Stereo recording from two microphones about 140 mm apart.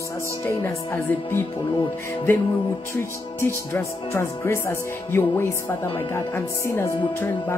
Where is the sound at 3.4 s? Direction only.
15° left (ahead or behind).